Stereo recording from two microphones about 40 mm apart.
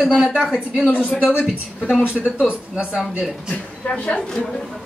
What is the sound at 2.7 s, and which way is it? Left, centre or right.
Speech, centre.